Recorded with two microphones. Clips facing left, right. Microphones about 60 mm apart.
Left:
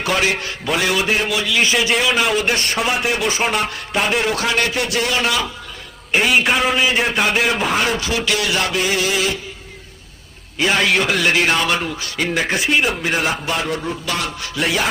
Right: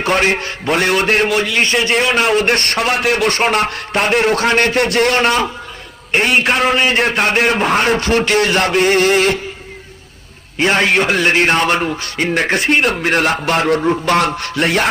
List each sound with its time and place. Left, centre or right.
0.0 s a man's voice: right
6.3 s a man's voice: centre
6.7 s a man's voice: right
10.6 s a man's voice: right
12.3 s a man's voice: right